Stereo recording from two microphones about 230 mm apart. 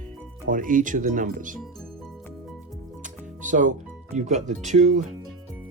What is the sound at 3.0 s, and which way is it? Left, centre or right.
Music, right.